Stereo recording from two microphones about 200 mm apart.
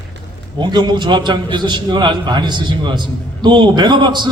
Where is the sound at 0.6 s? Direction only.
20° right (ahead or behind).